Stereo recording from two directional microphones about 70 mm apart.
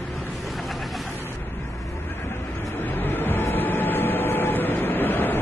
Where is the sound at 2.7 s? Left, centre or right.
Left.